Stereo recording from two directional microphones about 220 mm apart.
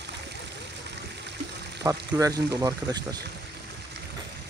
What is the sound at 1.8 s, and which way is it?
Speech, 15° right (ahead or behind).